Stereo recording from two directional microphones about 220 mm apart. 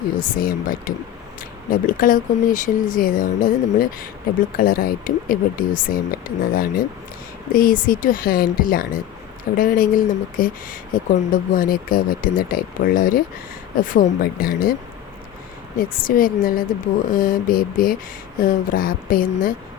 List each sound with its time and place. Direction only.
0.2 s speech: 40° left (ahead or behind)
15.8 s speech: 40° left (ahead or behind)